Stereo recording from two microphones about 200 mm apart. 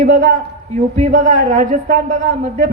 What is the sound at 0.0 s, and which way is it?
A man's voice, 40° right (ahead or behind).